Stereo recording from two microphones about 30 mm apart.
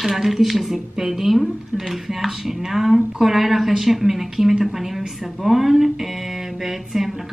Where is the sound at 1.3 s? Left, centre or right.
Centre.